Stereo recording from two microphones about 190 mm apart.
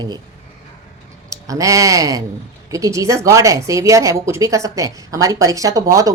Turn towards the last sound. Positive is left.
turn(degrees=-15)  # may be behind; listen again after turning